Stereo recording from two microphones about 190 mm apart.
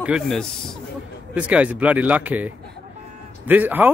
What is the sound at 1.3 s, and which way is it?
Speech, 5° right (ahead or behind).